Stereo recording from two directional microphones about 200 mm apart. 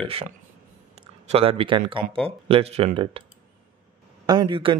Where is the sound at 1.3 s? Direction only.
30° right (ahead or behind).